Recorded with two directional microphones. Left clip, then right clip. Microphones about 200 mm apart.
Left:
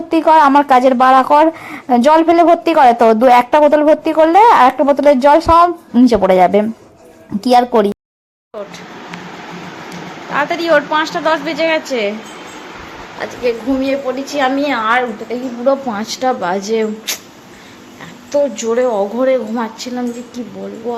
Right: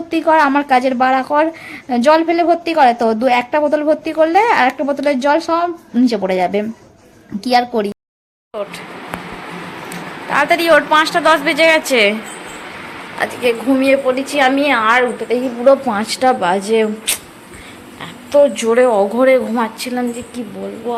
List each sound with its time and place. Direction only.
0.1 s a woman's voice: 5° left (ahead or behind)
3.2 s a woman's voice: 10° left (ahead or behind)
3.7 s a woman's voice: centre (ahead or behind); by 7.9 s 15° left (ahead or behind)
10.2 s a woman's voice: centre (ahead or behind)
13.1 s a woman's voice: centre (ahead or behind)